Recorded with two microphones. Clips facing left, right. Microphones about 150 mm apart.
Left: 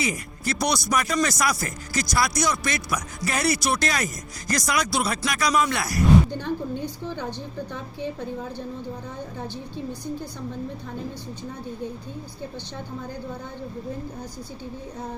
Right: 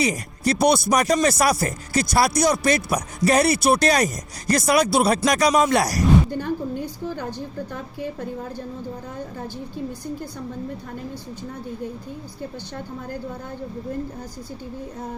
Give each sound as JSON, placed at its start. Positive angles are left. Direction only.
{"t": 0.0, "sound": "speech", "side_deg": -30}
{"t": 6.3, "sound": "a woman's voice", "side_deg": -5}